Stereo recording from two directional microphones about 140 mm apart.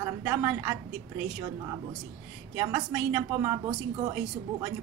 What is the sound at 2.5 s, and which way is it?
A woman's voice, 20° right (ahead or behind).